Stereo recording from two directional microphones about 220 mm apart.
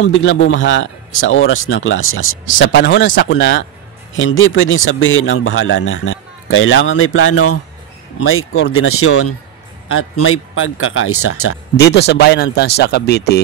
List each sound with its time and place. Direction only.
0.0 s a man's voice: 60° left (ahead or behind); by 11.5 s 80° left
11.7 s speech: 50° left (ahead or behind)